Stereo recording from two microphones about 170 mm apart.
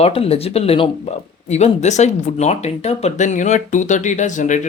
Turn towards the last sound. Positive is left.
turn(degrees=45)  # may be behind; listen again after turning